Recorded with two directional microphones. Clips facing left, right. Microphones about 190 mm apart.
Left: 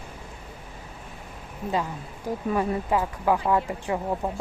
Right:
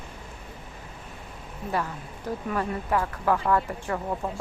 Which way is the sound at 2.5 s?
15° left (ahead or behind).